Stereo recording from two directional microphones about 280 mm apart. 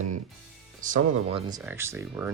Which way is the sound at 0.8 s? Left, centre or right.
Right.